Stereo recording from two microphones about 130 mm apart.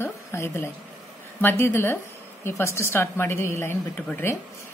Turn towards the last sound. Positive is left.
turn(degrees=15)  # may be behind; listen again after turning